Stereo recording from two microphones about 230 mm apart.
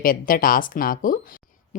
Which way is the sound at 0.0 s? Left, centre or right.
Left.